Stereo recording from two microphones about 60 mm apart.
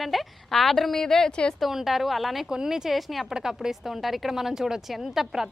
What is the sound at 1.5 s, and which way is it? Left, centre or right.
A woman's voice, centre.